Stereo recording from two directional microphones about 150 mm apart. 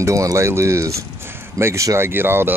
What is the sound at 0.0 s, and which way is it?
Speech, 20° right (ahead or behind).